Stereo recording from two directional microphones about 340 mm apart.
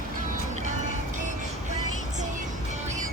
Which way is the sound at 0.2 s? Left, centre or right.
Right.